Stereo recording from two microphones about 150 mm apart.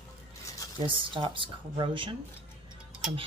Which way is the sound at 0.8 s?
35° right (ahead or behind).